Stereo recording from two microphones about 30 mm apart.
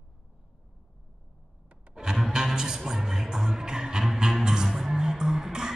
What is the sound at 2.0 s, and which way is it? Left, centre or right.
Music, right.